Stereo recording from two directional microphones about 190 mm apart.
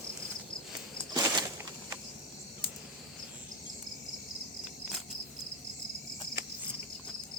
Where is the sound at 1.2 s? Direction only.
20° right (ahead or behind).